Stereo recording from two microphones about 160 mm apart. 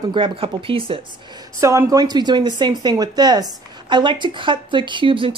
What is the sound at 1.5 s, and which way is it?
A woman's voice, 20° right (ahead or behind).